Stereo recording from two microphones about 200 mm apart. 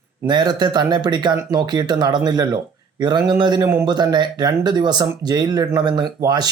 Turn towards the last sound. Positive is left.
turn(degrees=-20)  # may be behind; listen again after turning